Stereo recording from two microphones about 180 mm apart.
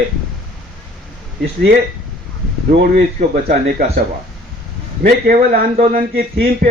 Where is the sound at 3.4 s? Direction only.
60° right (ahead or behind).